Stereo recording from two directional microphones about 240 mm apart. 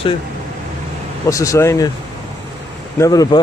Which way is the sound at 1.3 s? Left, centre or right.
Centre.